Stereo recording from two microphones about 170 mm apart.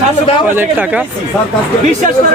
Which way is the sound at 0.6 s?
10° right (ahead or behind).